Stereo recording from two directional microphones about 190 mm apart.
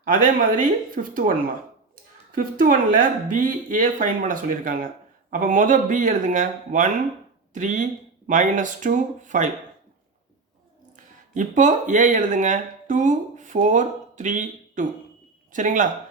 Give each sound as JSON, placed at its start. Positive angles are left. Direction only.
{"t": 0.1, "sound": "speech", "side_deg": -45}
{"t": 2.3, "sound": "speech", "side_deg": -45}
{"t": 10.9, "sound": "speech", "side_deg": -40}